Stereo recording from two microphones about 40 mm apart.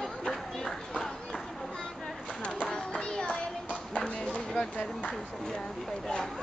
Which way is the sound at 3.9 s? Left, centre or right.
Left.